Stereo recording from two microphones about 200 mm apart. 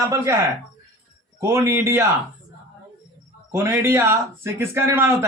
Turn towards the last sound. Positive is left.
turn(degrees=-10)  # may be behind; listen again after turning